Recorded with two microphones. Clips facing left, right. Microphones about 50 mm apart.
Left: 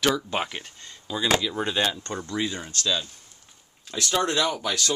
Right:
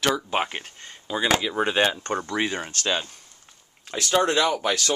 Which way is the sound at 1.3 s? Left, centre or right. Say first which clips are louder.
Right 1 dB; centre.